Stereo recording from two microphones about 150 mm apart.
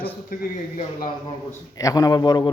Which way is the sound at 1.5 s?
25° left (ahead or behind).